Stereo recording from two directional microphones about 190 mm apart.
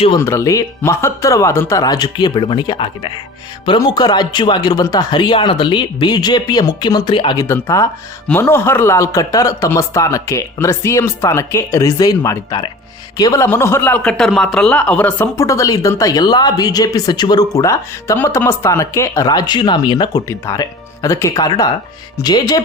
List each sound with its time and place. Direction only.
0.2 s a man's voice: 15° left (ahead or behind)